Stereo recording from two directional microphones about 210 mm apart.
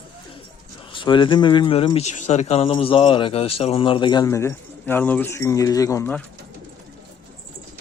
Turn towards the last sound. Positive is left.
turn(degrees=10)  # may be behind; listen again after turning